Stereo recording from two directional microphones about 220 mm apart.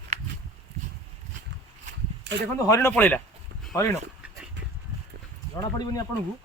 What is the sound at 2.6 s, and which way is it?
Speech, 10° left (ahead or behind).